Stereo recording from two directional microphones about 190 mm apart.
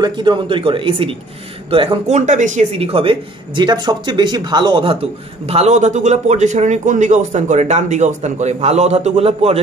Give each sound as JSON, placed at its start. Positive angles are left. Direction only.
{"t": 0.0, "sound": "speech", "side_deg": -25}
{"t": 5.5, "sound": "a man's voice", "side_deg": -35}